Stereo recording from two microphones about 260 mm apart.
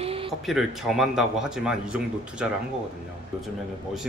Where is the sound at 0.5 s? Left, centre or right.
Centre.